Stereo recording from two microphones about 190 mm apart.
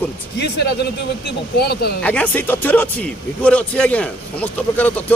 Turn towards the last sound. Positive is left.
turn(degrees=10)  # may be behind; listen again after turning